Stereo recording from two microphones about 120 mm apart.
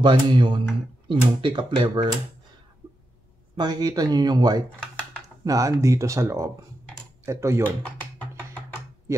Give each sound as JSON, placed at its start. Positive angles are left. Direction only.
{"t": 0.0, "sound": "speech", "side_deg": -40}
{"t": 3.5, "sound": "speech", "side_deg": -35}
{"t": 7.6, "sound": "speech", "side_deg": 15}